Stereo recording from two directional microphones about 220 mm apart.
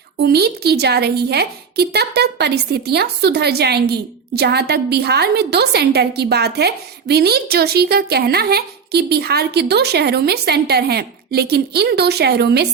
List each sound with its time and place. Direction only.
0.2 s a woman's voice: 45° right (ahead or behind)